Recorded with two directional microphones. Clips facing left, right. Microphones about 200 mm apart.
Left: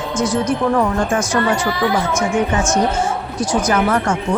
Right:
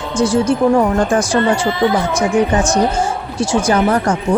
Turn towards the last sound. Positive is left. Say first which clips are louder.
# right 3 dB
turn(degrees=-35)  # may be behind; listen again after turning